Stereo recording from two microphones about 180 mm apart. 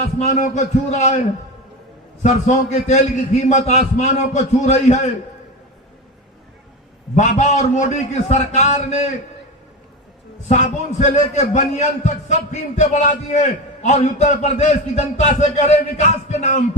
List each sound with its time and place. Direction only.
0.0 s a man's voice: 35° left (ahead or behind)
2.2 s a man's voice: 40° left (ahead or behind)
7.2 s a man's voice: 40° left (ahead or behind)
10.5 s a man's voice: 40° left (ahead or behind)